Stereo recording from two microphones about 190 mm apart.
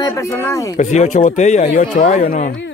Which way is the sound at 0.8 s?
40° left (ahead or behind).